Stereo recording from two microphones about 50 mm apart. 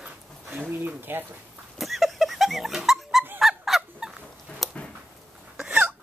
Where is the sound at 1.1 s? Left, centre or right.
Right.